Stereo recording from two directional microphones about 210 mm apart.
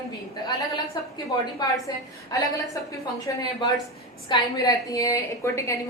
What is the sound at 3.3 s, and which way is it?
A woman's voice, 15° left (ahead or behind).